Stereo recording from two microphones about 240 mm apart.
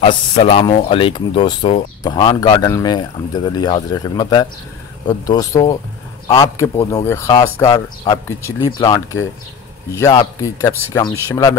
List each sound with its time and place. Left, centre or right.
0.0 s speech: left